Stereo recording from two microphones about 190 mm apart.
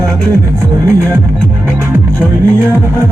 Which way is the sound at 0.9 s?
15° right (ahead or behind).